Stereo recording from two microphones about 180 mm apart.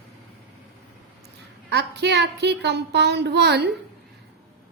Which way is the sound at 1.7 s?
70° right (ahead or behind).